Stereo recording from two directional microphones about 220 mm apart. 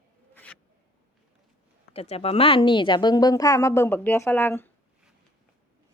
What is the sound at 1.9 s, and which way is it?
Speech, 25° left (ahead or behind).